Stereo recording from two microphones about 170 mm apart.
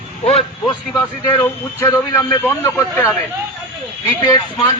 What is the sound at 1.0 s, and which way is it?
A man's voice, 15° left (ahead or behind).